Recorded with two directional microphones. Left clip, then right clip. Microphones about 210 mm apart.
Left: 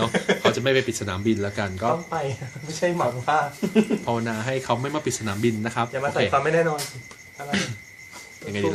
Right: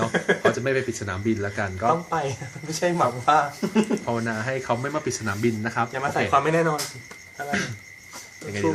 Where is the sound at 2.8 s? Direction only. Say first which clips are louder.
Right 1 dB; 50° right (ahead or behind).